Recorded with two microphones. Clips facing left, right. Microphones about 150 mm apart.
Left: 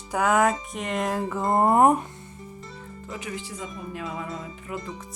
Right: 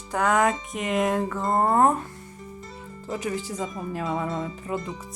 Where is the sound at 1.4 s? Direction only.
20° left (ahead or behind).